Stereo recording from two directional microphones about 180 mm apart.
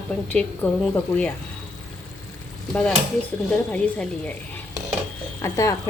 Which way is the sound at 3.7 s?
5° left (ahead or behind).